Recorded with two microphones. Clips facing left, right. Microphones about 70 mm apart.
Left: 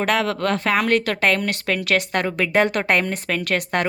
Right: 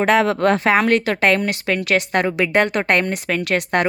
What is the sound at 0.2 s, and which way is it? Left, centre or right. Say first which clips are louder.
Speech: right 5 dB; right.